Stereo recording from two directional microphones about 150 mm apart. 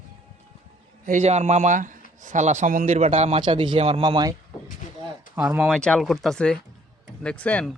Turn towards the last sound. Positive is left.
turn(degrees=5)  # may be behind; listen again after turning